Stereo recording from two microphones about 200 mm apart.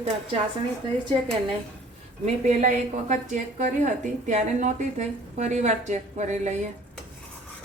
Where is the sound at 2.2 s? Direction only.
35° right (ahead or behind).